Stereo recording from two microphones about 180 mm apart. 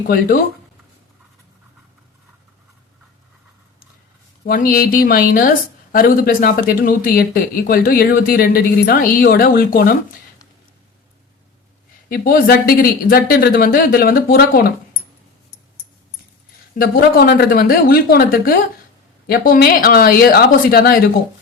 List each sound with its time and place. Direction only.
4.4 s speech: 50° left (ahead or behind)
12.0 s speech: 55° left (ahead or behind)
16.7 s speech: 55° left (ahead or behind)